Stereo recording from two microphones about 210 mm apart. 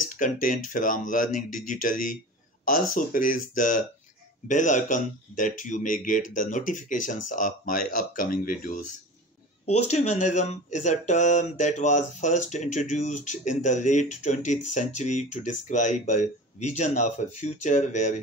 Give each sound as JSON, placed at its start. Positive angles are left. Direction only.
{"t": 0.0, "sound": "speech", "side_deg": 40}